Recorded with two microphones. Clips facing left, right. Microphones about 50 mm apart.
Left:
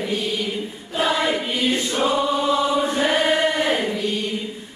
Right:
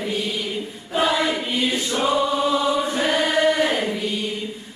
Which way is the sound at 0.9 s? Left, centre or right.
Centre.